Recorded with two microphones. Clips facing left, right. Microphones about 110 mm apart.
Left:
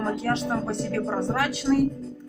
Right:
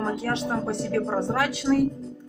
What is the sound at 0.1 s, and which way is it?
Speech, 10° right (ahead or behind).